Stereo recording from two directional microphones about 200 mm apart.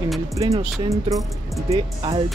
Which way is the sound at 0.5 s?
30° right (ahead or behind).